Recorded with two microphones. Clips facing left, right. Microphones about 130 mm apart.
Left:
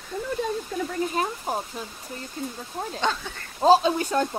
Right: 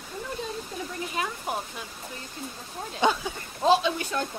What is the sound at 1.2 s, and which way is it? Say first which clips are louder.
Speech: left 2 dB; 40° left (ahead or behind).